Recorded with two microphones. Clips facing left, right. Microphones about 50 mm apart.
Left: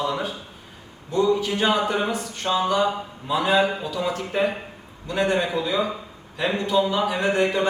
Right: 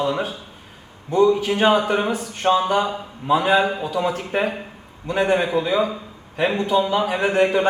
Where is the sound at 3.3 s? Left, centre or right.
Right.